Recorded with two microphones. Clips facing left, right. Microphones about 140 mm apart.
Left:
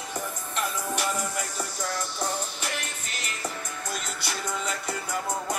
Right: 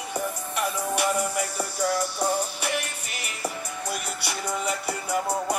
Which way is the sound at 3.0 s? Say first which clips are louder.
Right 2 dB; 10° right (ahead or behind).